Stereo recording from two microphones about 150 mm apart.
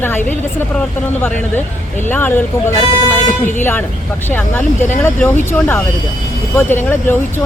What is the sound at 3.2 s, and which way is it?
Speech, 55° left (ahead or behind).